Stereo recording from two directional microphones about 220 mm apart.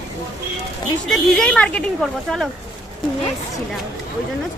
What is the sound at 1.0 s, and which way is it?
Speech, centre (ahead or behind).